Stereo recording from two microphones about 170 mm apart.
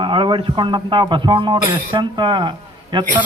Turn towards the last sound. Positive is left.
turn(degrees=-25)  # may be behind; listen again after turning